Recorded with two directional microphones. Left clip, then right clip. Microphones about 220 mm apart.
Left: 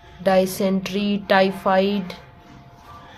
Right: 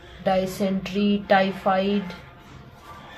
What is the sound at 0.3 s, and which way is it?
Speech, 50° left (ahead or behind).